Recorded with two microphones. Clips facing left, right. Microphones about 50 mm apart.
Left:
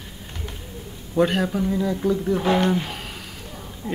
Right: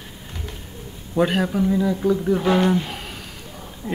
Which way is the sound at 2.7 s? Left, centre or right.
Centre.